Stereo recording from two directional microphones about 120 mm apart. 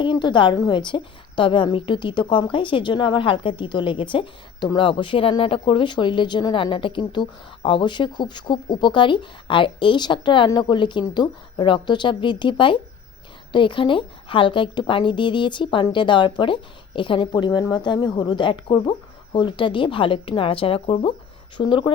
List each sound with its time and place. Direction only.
0.0 s a woman's voice: 40° left (ahead or behind)